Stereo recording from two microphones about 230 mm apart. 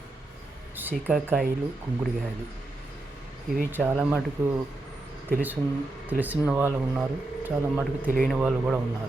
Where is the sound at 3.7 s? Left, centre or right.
Centre.